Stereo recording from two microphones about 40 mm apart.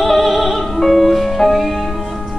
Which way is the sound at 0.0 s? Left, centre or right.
Centre.